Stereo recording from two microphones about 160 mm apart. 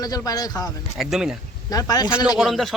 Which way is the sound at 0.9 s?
5° right (ahead or behind).